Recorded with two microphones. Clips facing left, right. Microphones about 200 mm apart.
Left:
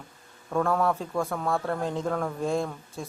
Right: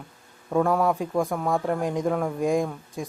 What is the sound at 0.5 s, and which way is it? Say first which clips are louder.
Speech: right 3 dB; 15° right (ahead or behind).